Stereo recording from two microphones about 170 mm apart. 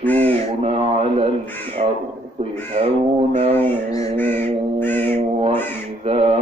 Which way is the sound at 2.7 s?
35° right (ahead or behind).